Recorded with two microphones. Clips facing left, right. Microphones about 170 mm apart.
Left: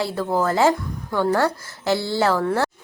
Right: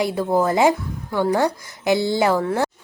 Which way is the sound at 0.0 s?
15° right (ahead or behind).